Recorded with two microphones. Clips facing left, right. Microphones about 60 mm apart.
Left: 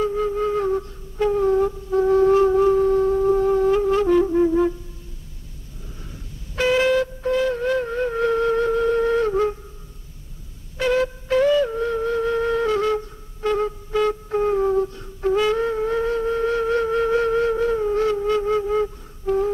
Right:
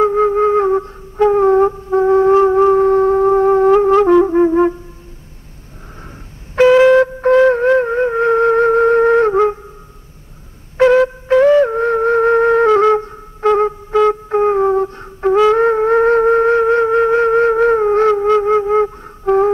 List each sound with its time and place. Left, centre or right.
0.0 s flute: right
6.5 s music: right
10.8 s music: right